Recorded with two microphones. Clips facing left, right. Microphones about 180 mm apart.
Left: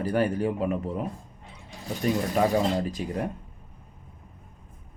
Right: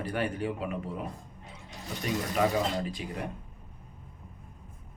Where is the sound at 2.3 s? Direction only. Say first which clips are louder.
Left 2 dB; 40° left (ahead or behind).